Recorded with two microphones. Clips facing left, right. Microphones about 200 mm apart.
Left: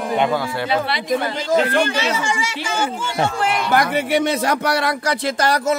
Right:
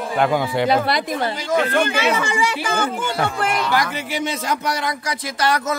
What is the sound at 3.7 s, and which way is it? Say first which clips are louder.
Speech: left 5 dB; 60° left (ahead or behind).